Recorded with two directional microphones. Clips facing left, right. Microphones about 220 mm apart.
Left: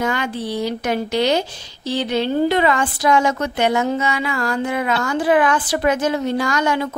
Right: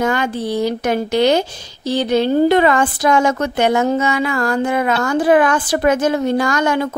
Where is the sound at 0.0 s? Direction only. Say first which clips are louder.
Right 4 dB; 45° right (ahead or behind).